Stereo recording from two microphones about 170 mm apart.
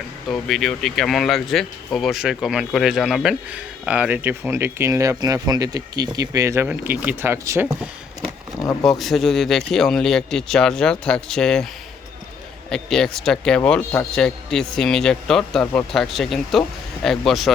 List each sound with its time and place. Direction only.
0.3 s speech: centre (ahead or behind); by 7.8 s 15° right (ahead or behind)
8.8 s speech: centre (ahead or behind)
12.7 s speech: 5° left (ahead or behind)
15.6 s speech: 15° left (ahead or behind)
15.9 s speech: centre (ahead or behind)